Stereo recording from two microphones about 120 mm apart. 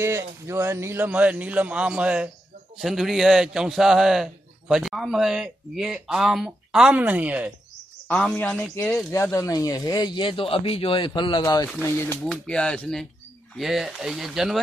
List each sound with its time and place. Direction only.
0.0 s a man's voice: 20° right (ahead or behind)
8.1 s speech: 10° left (ahead or behind)
9.1 s speech: 25° left (ahead or behind); by 11.4 s 40° left (ahead or behind)
11.4 s speech: 25° left (ahead or behind)
12.3 s a man's voice: 5° left (ahead or behind)